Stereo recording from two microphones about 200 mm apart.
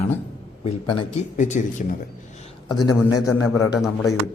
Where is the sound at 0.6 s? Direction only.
25° left (ahead or behind).